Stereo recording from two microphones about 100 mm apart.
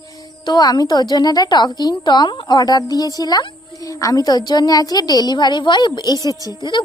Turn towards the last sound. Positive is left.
turn(degrees=45)  # may be behind; listen again after turning